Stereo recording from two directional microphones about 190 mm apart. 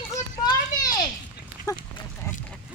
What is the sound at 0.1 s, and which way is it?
Children playing, 20° left (ahead or behind).